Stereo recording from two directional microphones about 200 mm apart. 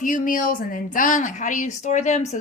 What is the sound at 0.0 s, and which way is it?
A woman's voice, 40° left (ahead or behind).